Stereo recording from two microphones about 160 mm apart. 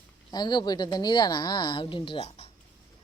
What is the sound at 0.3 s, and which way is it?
Speech, 25° left (ahead or behind).